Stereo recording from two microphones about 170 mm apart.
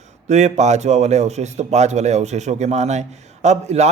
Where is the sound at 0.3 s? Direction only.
40° right (ahead or behind).